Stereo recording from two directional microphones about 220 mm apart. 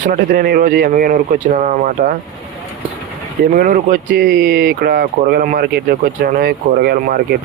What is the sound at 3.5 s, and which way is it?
Speech, 40° right (ahead or behind).